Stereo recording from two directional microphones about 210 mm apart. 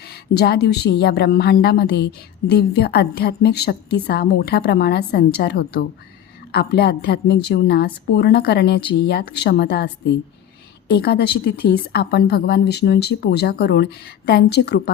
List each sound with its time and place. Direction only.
0.1 s a woman's voice: 50° left (ahead or behind)